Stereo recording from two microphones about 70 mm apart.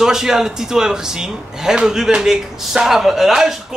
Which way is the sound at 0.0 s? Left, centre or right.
Centre.